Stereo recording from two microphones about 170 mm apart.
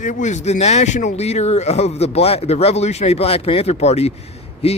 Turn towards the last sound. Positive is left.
turn(degrees=35)  # may be behind; listen again after turning